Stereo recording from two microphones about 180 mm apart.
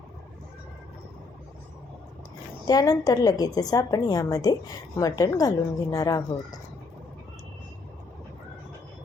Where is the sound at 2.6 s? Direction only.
20° left (ahead or behind).